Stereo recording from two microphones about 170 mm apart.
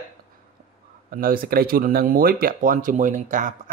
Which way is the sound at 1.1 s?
60° right (ahead or behind).